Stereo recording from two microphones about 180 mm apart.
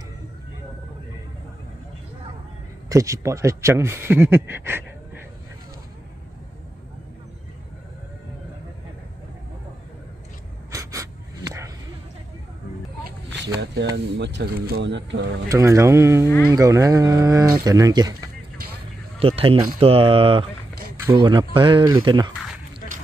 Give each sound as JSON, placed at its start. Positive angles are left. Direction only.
{"t": 2.9, "sound": "speech", "side_deg": -15}
{"t": 10.7, "sound": "dog", "side_deg": -15}
{"t": 13.9, "sound": "speech", "side_deg": -75}
{"t": 15.5, "sound": "speech", "side_deg": -15}
{"t": 19.1, "sound": "speech", "side_deg": -30}